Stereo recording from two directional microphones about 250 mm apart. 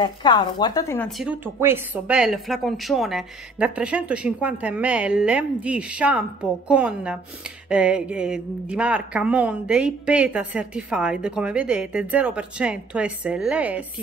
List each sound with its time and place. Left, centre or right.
0.0 s speech: centre